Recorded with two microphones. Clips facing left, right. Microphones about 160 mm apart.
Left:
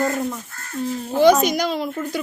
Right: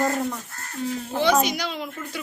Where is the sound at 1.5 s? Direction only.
45° left (ahead or behind).